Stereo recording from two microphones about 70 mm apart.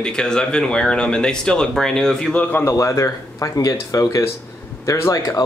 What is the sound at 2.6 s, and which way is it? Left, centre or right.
Speech, left.